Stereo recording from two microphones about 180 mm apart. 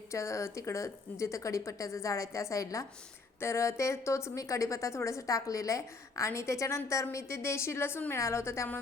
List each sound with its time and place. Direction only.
0.1 s a woman's voice: 15° left (ahead or behind)